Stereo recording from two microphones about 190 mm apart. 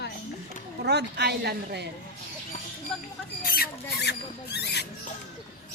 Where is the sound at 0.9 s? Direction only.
60° right (ahead or behind).